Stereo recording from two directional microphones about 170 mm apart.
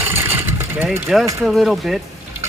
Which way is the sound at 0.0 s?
15° right (ahead or behind).